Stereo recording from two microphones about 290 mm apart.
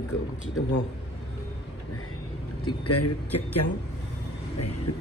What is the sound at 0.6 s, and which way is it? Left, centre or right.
Speech, left.